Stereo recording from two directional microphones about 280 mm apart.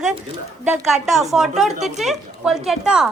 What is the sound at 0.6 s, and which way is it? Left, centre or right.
A woman's voice, centre.